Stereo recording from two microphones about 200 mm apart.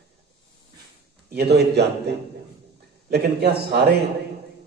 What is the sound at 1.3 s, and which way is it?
A man's voice, 55° right (ahead or behind).